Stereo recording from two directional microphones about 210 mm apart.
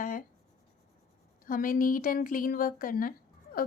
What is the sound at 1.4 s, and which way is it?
Speech, 40° left (ahead or behind).